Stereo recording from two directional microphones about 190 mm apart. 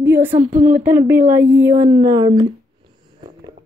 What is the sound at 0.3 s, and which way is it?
Speech, 25° right (ahead or behind).